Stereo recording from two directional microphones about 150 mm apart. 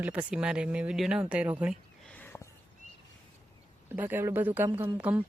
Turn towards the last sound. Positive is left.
turn(degrees=-10)  # may be behind; listen again after turning